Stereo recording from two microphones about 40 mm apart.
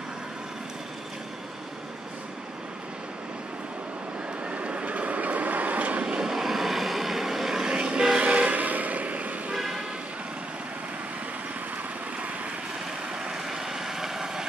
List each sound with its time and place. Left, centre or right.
4.5 s vehicle: right
6.0 s vehicle: right
6.3 s vehicle: centre
7.7 s train: right
8.2 s vehicle: right
9.5 s vehicle: centre
13.1 s vehicle: right
13.4 s vehicle: centre